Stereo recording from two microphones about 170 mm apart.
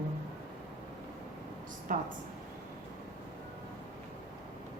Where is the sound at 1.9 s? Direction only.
50° right (ahead or behind).